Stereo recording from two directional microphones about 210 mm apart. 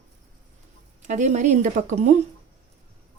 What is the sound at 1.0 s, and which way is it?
Speech, 35° right (ahead or behind).